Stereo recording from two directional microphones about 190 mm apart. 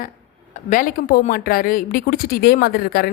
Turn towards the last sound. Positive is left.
turn(degrees=50)  # may be behind; listen again after turning